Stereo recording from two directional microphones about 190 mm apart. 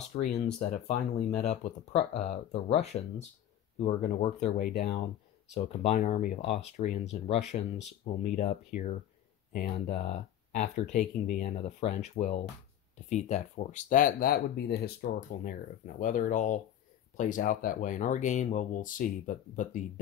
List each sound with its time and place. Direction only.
0.1 s speech: 35° left (ahead or behind)
9.5 s speech: 45° left (ahead or behind)
10.0 s speech: 35° left (ahead or behind)